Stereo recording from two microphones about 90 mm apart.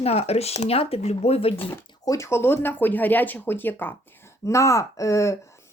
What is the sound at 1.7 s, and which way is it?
Speech, 35° left (ahead or behind).